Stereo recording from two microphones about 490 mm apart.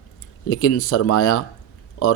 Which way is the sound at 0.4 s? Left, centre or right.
Left.